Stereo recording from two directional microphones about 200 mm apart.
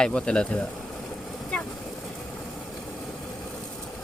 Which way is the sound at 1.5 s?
5° left (ahead or behind).